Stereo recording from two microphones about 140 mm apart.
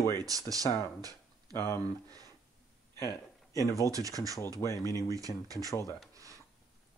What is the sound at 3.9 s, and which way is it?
Speech, 25° right (ahead or behind).